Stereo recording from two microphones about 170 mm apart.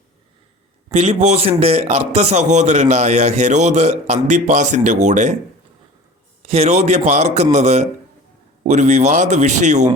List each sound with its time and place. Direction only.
0.9 s a man's voice: 40° right (ahead or behind)
6.5 s a man's voice: 40° right (ahead or behind)